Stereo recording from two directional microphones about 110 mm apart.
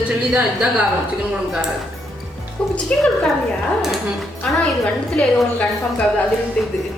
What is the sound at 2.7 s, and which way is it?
Speech, 10° left (ahead or behind).